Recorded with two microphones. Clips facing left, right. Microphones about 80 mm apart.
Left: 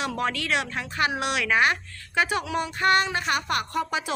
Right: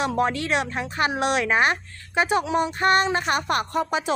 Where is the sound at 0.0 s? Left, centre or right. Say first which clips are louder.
Right 5 dB; right.